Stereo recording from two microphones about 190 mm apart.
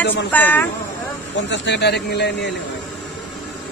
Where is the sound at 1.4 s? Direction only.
65° left (ahead or behind).